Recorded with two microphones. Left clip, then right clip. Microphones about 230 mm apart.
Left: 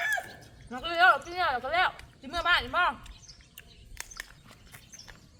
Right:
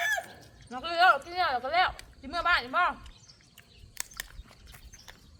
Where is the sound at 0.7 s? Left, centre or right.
Centre.